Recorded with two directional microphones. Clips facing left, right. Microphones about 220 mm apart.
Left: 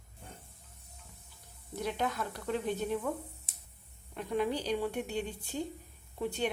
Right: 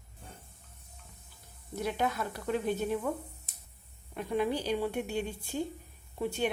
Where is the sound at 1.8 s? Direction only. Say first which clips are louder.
Right 2 dB; 5° right (ahead or behind).